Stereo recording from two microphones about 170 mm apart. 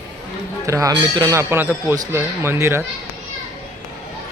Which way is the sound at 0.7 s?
20° right (ahead or behind).